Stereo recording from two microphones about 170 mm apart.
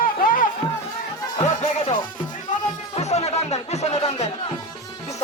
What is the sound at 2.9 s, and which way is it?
Music, 40° left (ahead or behind).